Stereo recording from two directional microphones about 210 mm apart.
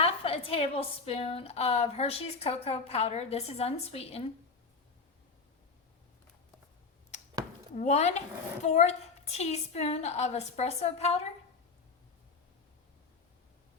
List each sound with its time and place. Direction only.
0.0 s a woman's voice: 25° left (ahead or behind)
7.8 s a woman's voice: 30° left (ahead or behind)